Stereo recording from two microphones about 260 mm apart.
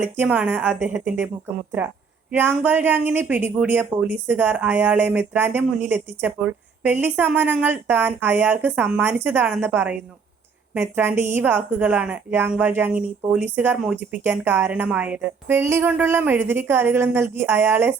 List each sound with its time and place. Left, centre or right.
0.0 s speech: centre
2.3 s speech: centre